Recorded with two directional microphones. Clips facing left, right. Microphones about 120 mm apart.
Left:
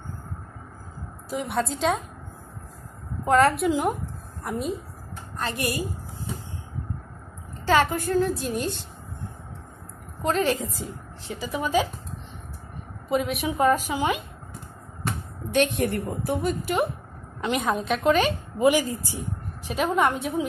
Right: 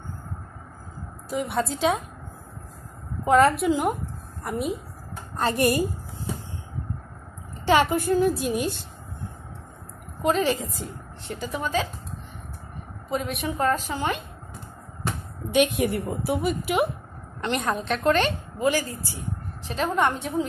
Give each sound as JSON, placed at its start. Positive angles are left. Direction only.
{"t": 1.3, "sound": "a woman's voice", "side_deg": 0}
{"t": 3.3, "sound": "a woman's voice", "side_deg": 0}
{"t": 7.6, "sound": "a woman's voice", "side_deg": -10}
{"t": 10.2, "sound": "a woman's voice", "side_deg": 0}
{"t": 13.1, "sound": "a woman's voice", "side_deg": 5}
{"t": 15.5, "sound": "a woman's voice", "side_deg": -10}
{"t": 18.6, "sound": "a woman's voice", "side_deg": 20}
{"t": 19.7, "sound": "a woman's voice", "side_deg": 5}